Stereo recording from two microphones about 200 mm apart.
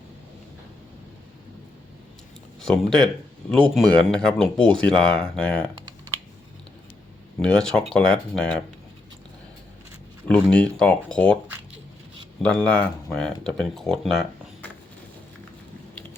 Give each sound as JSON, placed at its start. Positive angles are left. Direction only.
{"t": 2.6, "sound": "speech", "side_deg": 5}
{"t": 7.3, "sound": "speech", "side_deg": 5}
{"t": 10.4, "sound": "speech", "side_deg": 5}
{"t": 12.4, "sound": "speech", "side_deg": 5}